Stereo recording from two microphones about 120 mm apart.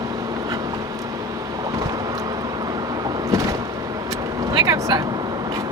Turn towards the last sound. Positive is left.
turn(degrees=-25)  # may be behind; listen again after turning